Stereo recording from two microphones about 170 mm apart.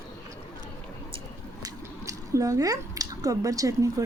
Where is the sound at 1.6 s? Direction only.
20° right (ahead or behind).